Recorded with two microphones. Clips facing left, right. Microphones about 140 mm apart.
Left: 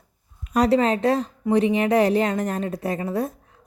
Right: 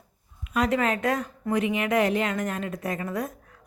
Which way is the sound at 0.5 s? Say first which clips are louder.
Left 6 dB; 35° left (ahead or behind).